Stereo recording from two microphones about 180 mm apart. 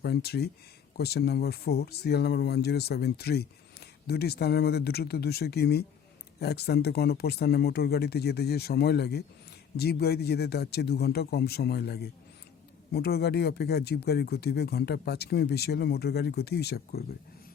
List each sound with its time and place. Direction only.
0.0 s speech: 60° left (ahead or behind)